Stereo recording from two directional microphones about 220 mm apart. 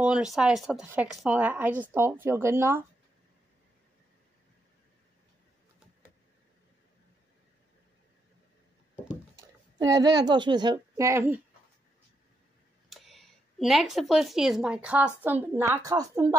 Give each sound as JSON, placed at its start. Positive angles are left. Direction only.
{"t": 0.0, "sound": "speech", "side_deg": -5}
{"t": 9.1, "sound": "a child's voice", "side_deg": -15}
{"t": 12.9, "sound": "speech", "side_deg": 0}